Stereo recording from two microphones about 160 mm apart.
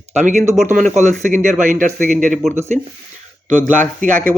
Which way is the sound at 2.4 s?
Centre (ahead or behind).